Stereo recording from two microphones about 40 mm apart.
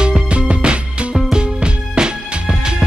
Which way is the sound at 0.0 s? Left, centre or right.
Right.